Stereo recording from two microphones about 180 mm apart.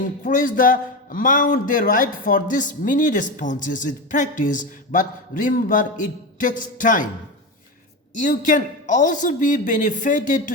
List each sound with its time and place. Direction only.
0.0 s speech: 45° left (ahead or behind)
8.1 s speech: 45° left (ahead or behind)